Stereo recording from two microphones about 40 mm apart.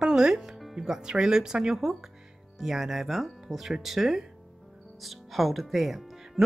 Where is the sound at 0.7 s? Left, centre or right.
Centre.